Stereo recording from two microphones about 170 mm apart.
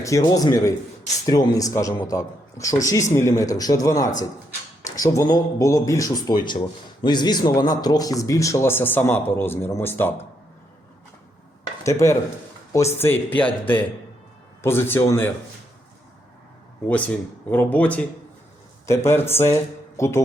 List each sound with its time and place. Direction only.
0.0 s speech: 20° left (ahead or behind)
11.8 s speech: 15° left (ahead or behind)
16.9 s speech: 10° left (ahead or behind)